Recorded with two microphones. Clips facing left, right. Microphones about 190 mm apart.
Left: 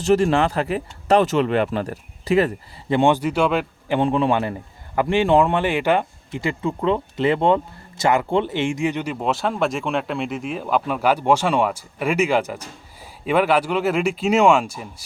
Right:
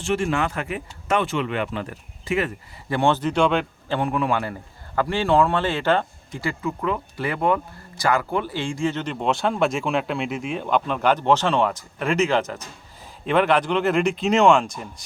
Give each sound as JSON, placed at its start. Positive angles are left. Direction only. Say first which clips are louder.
{"t": 0.0, "sound": "speech", "louder": "left 6 dB", "side_deg": 40}
{"t": 2.9, "sound": "speech", "louder": "left 3 dB", "side_deg": 15}
{"t": 3.9, "sound": "a man's voice", "louder": "left 4 dB", "side_deg": 25}